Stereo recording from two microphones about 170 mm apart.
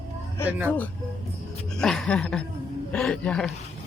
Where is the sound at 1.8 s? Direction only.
5° left (ahead or behind).